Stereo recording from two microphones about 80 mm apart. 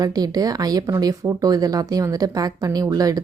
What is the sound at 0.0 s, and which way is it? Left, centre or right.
Speech, right.